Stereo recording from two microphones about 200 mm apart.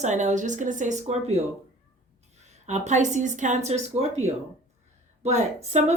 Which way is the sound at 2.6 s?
35° right (ahead or behind).